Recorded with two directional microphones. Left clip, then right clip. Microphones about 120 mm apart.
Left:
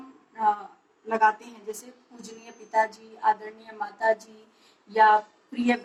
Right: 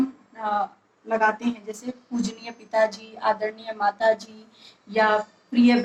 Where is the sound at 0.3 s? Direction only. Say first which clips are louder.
Even; 30° right (ahead or behind).